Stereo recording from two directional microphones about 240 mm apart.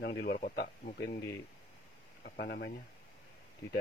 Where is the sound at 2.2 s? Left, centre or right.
Left.